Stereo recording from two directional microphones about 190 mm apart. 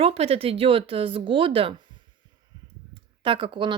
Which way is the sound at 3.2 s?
25° right (ahead or behind).